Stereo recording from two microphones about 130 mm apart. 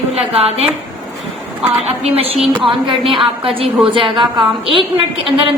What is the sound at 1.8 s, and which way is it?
A woman's voice, 50° right (ahead or behind).